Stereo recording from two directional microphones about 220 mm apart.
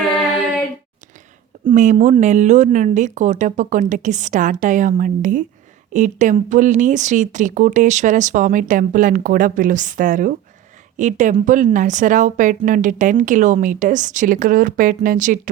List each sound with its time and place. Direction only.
1.7 s a woman's voice: 35° right (ahead or behind)